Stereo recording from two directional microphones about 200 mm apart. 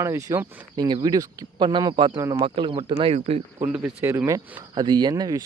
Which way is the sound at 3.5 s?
10° right (ahead or behind).